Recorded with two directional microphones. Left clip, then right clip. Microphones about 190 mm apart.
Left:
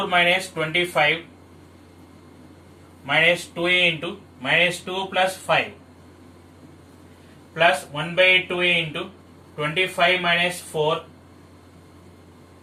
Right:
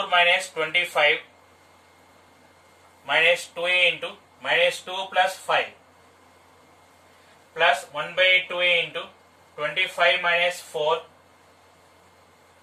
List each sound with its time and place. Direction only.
0.1 s speech: 15° right (ahead or behind)
3.1 s speech: 10° right (ahead or behind)
7.5 s speech: centre (ahead or behind)